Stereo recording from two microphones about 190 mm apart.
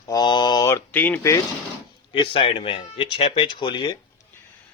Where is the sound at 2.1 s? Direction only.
25° left (ahead or behind).